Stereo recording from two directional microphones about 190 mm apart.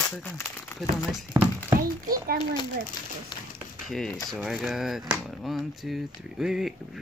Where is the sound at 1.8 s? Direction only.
50° right (ahead or behind).